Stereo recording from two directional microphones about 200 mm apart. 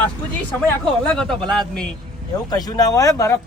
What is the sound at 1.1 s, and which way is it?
Speech, 5° left (ahead or behind).